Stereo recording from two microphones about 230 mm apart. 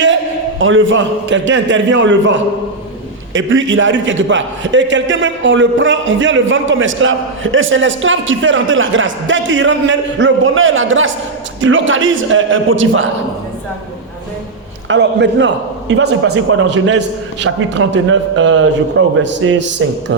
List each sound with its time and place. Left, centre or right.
0.6 s a man's voice: right
14.8 s a man's voice: right